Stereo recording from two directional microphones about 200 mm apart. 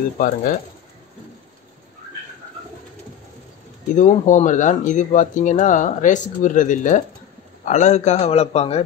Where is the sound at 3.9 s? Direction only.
40° left (ahead or behind).